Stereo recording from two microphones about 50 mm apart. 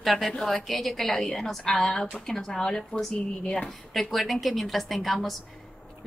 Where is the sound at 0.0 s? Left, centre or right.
Centre.